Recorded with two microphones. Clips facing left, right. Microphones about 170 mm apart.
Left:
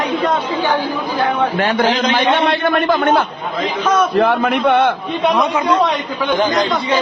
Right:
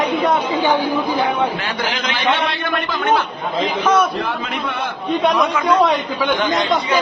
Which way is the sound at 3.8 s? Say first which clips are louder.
Left 1 dB; 10° right (ahead or behind).